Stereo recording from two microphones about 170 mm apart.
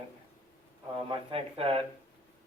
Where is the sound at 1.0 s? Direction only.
35° right (ahead or behind).